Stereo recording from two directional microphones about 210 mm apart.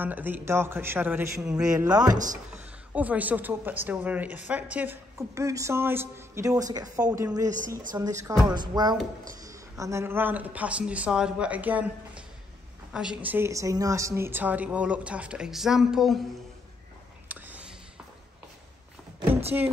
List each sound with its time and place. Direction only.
0.0 s a woman's voice: 10° right (ahead or behind)
7.1 s a woman's voice: 5° right (ahead or behind)
7.3 s a woman's voice: 15° right (ahead or behind)
8.3 s music: 20° right (ahead or behind)
9.3 s a woman's voice: 15° right (ahead or behind)
17.3 s whispering: 5° right (ahead or behind)
19.5 s a woman's voice: 10° right (ahead or behind)